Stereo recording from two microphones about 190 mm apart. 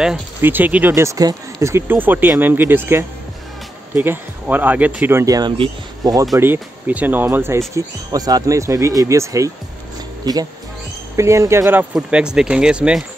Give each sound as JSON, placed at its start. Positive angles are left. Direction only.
{"t": 0.0, "sound": "speech", "side_deg": -5}
{"t": 11.1, "sound": "speech", "side_deg": -15}